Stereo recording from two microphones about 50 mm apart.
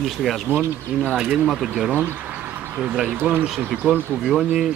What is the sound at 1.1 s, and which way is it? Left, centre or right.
Speech, centre.